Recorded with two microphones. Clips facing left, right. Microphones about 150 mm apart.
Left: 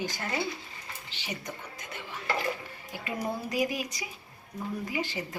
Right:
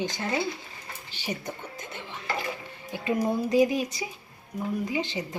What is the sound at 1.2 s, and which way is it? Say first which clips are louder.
Music: right 5 dB; 30° right (ahead or behind).